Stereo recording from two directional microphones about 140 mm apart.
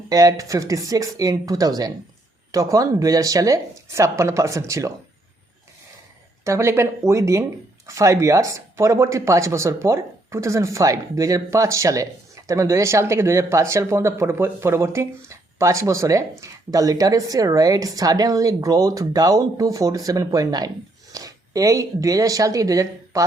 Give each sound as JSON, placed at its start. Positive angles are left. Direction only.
{"t": 0.1, "sound": "a woman's voice", "side_deg": -25}
{"t": 6.4, "sound": "a woman's voice", "side_deg": -20}